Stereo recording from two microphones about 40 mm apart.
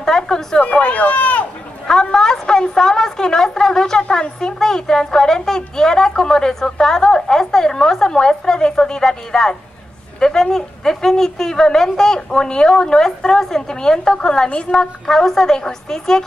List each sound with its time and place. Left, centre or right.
0.0 s a sound: centre
0.6 s speech: left
2.1 s a woman's voice: centre